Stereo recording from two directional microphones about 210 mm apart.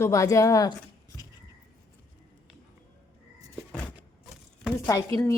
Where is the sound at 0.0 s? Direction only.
15° left (ahead or behind).